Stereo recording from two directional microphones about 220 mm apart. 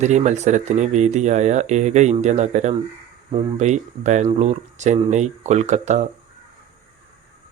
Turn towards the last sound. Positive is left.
turn(degrees=-30)  # may be behind; listen again after turning